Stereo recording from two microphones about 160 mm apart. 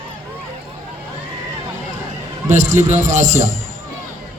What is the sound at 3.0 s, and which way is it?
Speech, 50° right (ahead or behind).